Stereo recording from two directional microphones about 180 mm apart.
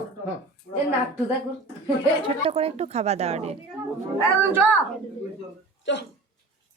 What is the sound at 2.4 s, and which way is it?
Speech, 35° right (ahead or behind).